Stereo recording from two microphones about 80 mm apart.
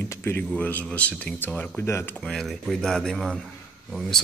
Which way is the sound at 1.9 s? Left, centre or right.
Left.